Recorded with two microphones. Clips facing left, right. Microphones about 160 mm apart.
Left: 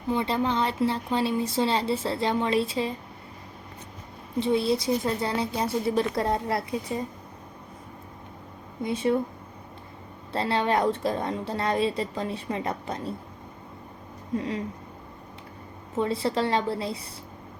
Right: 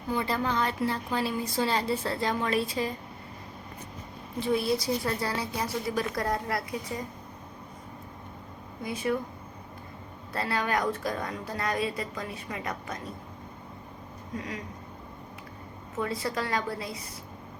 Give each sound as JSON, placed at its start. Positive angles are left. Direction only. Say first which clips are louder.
{"t": 0.1, "sound": "a woman's voice", "louder": "left 3 dB", "side_deg": 25}
{"t": 4.4, "sound": "a woman's voice", "louder": "left 3 dB", "side_deg": 25}
{"t": 8.8, "sound": "a woman's voice", "louder": "left 5 dB", "side_deg": 25}
{"t": 10.3, "sound": "a woman's voice", "louder": "left 5 dB", "side_deg": 25}
{"t": 14.3, "sound": "a woman's voice", "louder": "left 7 dB", "side_deg": 30}
{"t": 16.0, "sound": "a woman's voice", "louder": "left 5 dB", "side_deg": 30}